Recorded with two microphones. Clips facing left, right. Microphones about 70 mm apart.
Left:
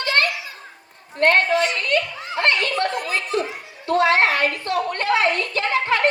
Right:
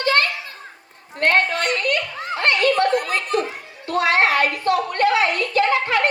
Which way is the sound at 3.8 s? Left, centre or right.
Left.